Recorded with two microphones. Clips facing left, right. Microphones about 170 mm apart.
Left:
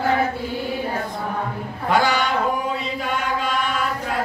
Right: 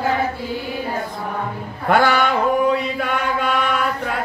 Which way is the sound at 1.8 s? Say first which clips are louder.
Right 3 dB; 55° right (ahead or behind).